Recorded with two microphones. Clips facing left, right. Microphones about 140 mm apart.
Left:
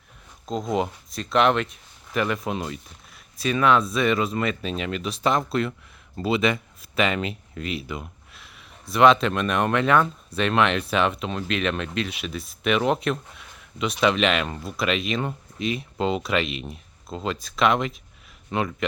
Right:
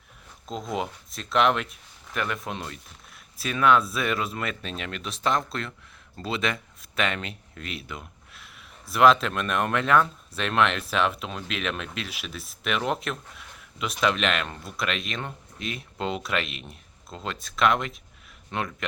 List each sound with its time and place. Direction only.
0.7 s speech: centre (ahead or behind)